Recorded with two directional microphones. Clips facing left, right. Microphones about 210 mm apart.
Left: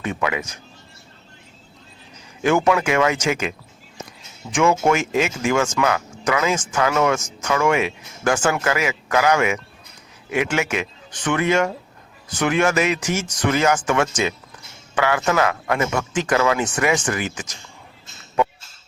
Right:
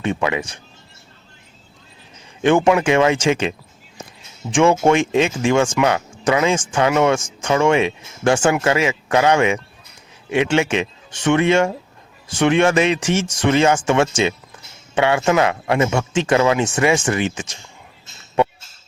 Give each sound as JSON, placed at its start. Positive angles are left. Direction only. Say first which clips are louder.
{"t": 0.0, "sound": "speech", "louder": "right 3 dB", "side_deg": -25}
{"t": 2.4, "sound": "speech", "louder": "right 3 dB", "side_deg": -30}
{"t": 4.5, "sound": "speech", "louder": "right 4 dB", "side_deg": -30}